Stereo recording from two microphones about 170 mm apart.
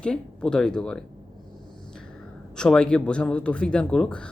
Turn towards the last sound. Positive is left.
turn(degrees=5)  # may be behind; listen again after turning